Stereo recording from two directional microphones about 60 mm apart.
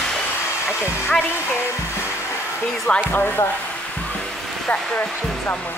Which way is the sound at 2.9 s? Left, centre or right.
Left.